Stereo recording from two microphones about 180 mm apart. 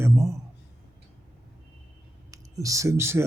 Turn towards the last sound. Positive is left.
turn(degrees=-15)  # may be behind; listen again after turning